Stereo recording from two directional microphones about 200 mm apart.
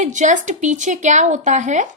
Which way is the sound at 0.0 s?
40° right (ahead or behind).